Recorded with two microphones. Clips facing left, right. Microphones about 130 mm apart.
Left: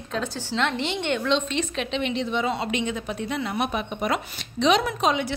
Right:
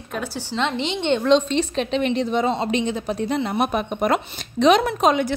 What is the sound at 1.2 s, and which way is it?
A woman's voice, 35° right (ahead or behind).